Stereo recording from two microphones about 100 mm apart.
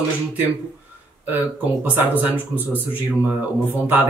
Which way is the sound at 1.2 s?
20° right (ahead or behind).